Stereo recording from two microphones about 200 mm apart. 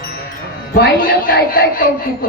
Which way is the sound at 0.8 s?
45° left (ahead or behind).